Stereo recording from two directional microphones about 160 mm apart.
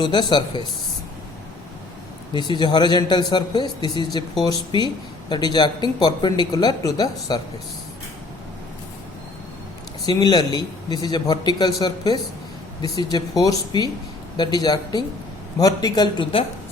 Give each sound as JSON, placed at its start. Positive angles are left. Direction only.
{"t": 0.0, "sound": "a man's voice", "side_deg": 30}
{"t": 2.3, "sound": "a man's voice", "side_deg": 30}
{"t": 10.1, "sound": "a man's voice", "side_deg": 25}